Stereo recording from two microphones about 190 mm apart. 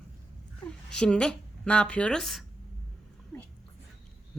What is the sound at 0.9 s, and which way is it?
Speech, 5° left (ahead or behind).